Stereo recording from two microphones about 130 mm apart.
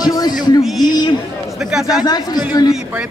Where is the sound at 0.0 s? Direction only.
30° left (ahead or behind).